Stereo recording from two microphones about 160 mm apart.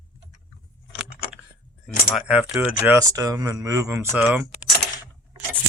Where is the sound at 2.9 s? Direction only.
20° right (ahead or behind).